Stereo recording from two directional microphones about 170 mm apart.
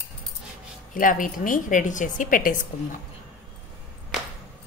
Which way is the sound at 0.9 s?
50° left (ahead or behind).